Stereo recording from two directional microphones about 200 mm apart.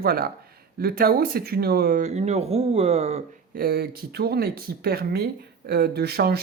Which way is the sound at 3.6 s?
50° right (ahead or behind).